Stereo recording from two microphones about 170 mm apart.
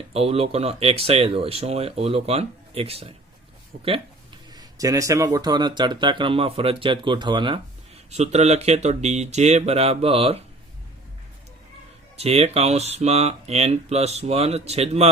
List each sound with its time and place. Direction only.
0.1 s speech: 35° right (ahead or behind)
8.1 s speech: 40° right (ahead or behind)
12.1 s speech: 40° right (ahead or behind)